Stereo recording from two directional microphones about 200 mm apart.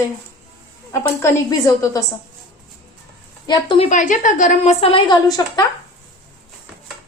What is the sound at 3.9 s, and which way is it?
Speech, 40° left (ahead or behind).